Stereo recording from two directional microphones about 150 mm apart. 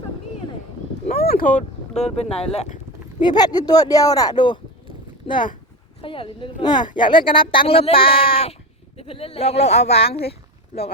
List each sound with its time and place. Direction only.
1.1 s a sound: 90° left; by 1.6 s 65° left (ahead or behind)
2.0 s speech: 45° left (ahead or behind)
3.2 s a woman's voice: 30° left (ahead or behind)